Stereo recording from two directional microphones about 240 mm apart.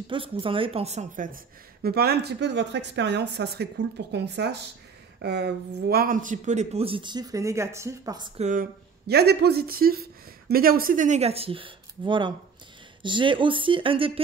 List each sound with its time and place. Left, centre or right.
0.1 s speech: right
8.4 s speech: right